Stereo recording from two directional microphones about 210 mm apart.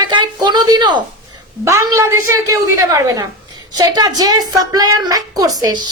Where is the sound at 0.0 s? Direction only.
20° right (ahead or behind).